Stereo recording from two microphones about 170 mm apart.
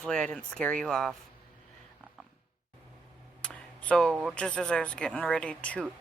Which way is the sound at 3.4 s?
5° left (ahead or behind).